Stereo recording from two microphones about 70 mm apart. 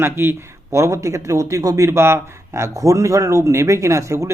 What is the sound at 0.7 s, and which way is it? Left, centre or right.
A man's voice, right.